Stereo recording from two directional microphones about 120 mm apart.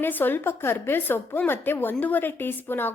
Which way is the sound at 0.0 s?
15° left (ahead or behind).